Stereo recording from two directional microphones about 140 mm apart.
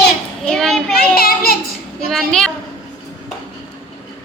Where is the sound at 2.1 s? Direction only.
Centre (ahead or behind).